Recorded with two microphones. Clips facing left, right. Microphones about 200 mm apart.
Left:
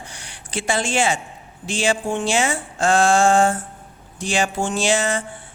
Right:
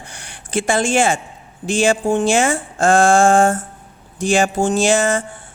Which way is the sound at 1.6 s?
45° right (ahead or behind).